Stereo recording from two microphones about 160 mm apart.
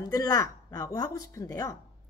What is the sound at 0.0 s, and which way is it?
A woman's voice, 20° left (ahead or behind).